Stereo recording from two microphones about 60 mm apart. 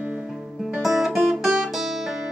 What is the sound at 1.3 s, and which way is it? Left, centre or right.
Guitar, centre.